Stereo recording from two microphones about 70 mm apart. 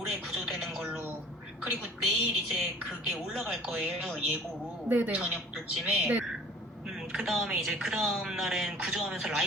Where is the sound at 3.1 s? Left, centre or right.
Centre.